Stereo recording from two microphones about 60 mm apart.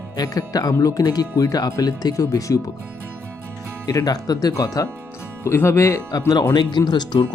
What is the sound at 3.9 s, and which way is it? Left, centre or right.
Speech, left.